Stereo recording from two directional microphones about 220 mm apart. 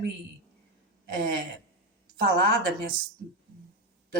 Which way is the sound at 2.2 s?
45° right (ahead or behind).